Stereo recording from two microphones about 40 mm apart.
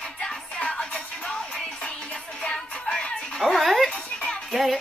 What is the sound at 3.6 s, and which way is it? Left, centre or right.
Frog, centre.